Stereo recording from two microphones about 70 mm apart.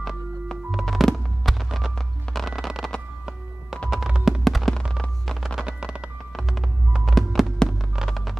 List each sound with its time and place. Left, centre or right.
0.0 s music: centre
3.9 s fireworks: centre
5.2 s music: centre
6.3 s music: centre